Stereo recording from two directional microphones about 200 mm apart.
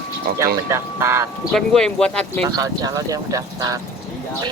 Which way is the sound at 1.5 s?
5° left (ahead or behind).